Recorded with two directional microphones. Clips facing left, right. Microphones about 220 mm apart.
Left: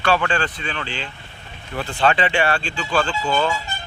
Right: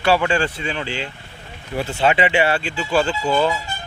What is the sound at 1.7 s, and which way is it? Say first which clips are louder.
Speech: right 3 dB; 30° right (ahead or behind).